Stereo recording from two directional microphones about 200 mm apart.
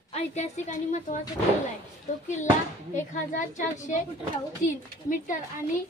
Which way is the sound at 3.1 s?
40° left (ahead or behind).